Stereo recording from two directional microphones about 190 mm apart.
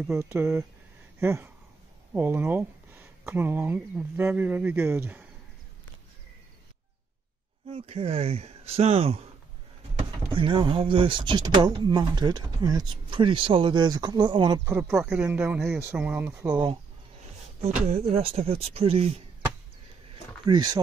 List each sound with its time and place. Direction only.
0.1 s speech: 15° right (ahead or behind)
7.7 s speech: 30° right (ahead or behind)
10.3 s speech: 25° right (ahead or behind)
14.8 s speech: 5° right (ahead or behind); by 16.7 s 20° right (ahead or behind)
17.6 s speech: 35° right (ahead or behind)
20.4 s speech: 20° right (ahead or behind)